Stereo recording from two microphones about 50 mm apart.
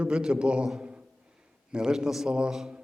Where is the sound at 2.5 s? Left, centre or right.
Centre.